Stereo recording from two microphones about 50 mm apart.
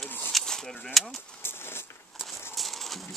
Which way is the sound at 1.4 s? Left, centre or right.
Left.